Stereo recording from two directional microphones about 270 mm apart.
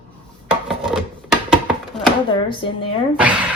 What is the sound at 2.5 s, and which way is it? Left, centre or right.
Speech, centre.